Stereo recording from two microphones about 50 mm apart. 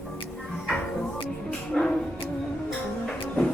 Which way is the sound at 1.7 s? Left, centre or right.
Centre.